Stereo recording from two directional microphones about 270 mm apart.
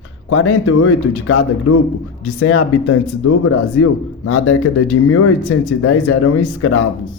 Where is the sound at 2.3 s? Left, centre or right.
Left.